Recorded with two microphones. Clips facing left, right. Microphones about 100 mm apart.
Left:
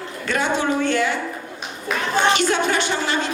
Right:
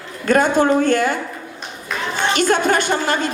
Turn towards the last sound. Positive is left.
turn(degrees=-50)  # may be behind; listen again after turning